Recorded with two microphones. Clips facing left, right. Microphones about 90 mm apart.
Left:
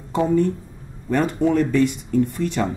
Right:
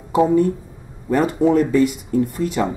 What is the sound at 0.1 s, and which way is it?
A woman's voice, 10° right (ahead or behind).